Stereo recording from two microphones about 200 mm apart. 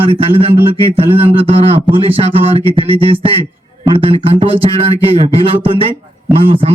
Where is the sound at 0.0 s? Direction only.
30° right (ahead or behind).